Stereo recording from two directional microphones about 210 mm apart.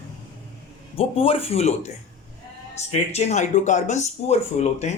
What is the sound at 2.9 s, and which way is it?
Speech, 30° left (ahead or behind).